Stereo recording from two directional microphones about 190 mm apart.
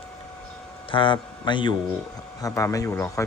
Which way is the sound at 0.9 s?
25° left (ahead or behind).